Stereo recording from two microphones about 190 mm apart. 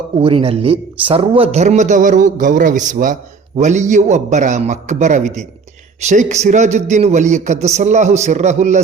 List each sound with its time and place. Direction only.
0.2 s a man's voice: 30° right (ahead or behind)